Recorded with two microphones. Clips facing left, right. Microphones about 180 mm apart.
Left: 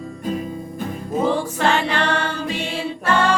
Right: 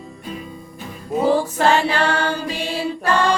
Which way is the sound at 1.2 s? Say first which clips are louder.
Right 4 dB; 40° right (ahead or behind).